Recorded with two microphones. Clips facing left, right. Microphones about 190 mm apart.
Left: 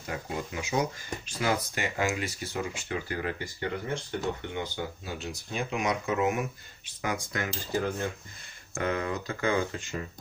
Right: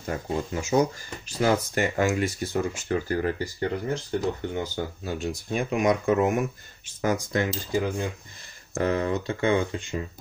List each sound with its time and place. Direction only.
0.0 s speech: 40° right (ahead or behind)
7.0 s cutlery: 40° right (ahead or behind)
7.7 s cutlery: 15° right (ahead or behind)
8.7 s speech: 35° right (ahead or behind)